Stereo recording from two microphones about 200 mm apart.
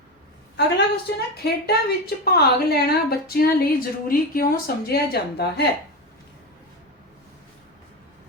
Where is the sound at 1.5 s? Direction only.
55° left (ahead or behind).